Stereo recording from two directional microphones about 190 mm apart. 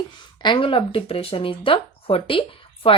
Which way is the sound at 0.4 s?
25° left (ahead or behind).